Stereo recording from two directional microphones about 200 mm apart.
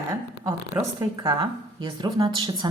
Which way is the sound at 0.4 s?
15° right (ahead or behind).